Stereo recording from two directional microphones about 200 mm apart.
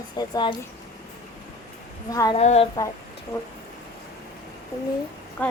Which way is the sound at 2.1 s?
20° left (ahead or behind).